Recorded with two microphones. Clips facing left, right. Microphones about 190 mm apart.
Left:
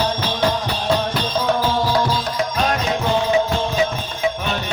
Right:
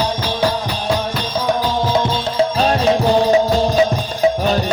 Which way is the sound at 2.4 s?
30° right (ahead or behind).